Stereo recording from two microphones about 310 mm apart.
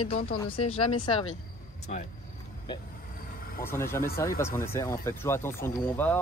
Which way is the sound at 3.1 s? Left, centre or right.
Left.